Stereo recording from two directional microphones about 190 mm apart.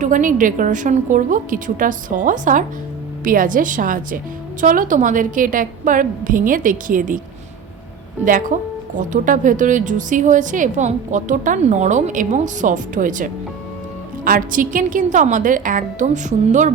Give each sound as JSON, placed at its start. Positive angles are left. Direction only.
{"t": 0.0, "sound": "a woman's voice", "side_deg": -40}
{"t": 8.2, "sound": "a woman's voice", "side_deg": -45}